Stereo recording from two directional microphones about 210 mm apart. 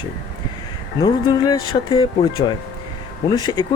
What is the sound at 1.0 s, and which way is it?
Speech, 20° left (ahead or behind).